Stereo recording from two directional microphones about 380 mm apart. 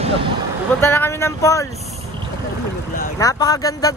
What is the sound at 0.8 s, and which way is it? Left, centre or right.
Speech, centre.